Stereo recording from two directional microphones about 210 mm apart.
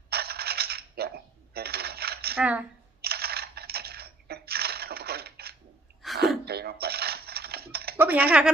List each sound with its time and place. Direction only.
0.1 s coin: 50° right (ahead or behind)
2.4 s speech: 5° right (ahead or behind)
3.0 s typing: 45° right (ahead or behind)
6.0 s a sound: centre (ahead or behind)
6.4 s a sound: 50° right (ahead or behind)
7.9 s speech: 10° right (ahead or behind)